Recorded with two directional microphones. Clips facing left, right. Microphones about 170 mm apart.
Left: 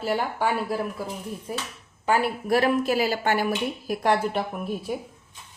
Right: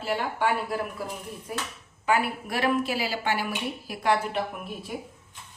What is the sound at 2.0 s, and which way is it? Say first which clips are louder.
A woman's voice: left 3 dB; 40° left (ahead or behind).